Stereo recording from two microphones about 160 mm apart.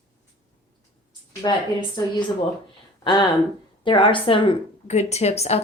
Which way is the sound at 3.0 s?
30° left (ahead or behind).